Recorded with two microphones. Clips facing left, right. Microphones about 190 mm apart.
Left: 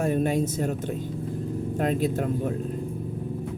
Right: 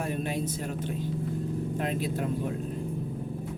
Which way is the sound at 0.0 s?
45° left (ahead or behind).